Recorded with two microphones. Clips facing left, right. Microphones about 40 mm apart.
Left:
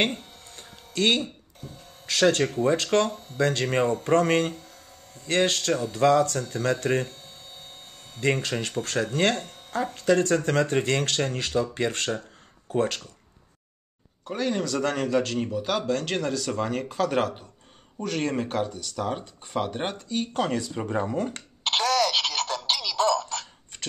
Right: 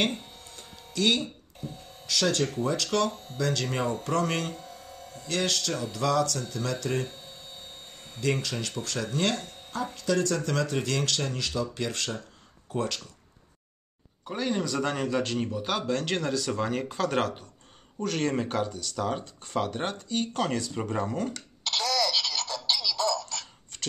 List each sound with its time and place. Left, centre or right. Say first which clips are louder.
0.0 s music: left 2 dB; left
1.6 s speech: right 4 dB; centre
2.0 s speech: left 5 dB; left
3.1 s speech: left 1 dB; centre
3.3 s speech: left 6 dB; left
7.1 s hum: even; centre
8.2 s speech: left 4 dB; left
14.2 s speech: left 2 dB; centre
20.4 s speech: left 2 dB; centre
21.6 s a sound: left 4 dB; left